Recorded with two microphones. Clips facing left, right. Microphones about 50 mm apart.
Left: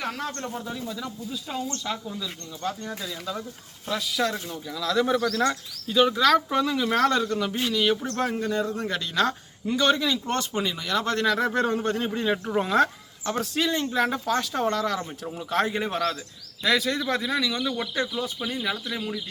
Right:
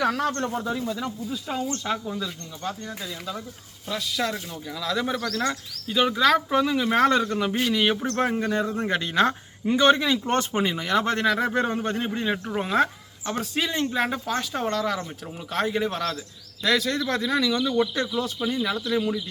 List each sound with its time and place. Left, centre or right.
0.2 s speech: right
0.5 s speech: right
0.9 s speech: right
1.3 s a man's voice: centre
2.9 s speech: centre
3.8 s speech: centre
5.4 s a man's voice: centre